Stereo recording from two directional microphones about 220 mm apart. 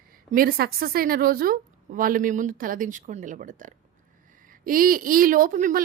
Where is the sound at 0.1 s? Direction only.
40° right (ahead or behind).